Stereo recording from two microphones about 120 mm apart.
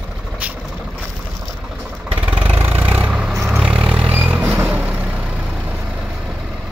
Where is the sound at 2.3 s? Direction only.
15° right (ahead or behind).